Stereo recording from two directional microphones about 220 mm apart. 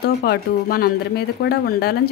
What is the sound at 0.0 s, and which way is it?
A woman's voice, 45° left (ahead or behind).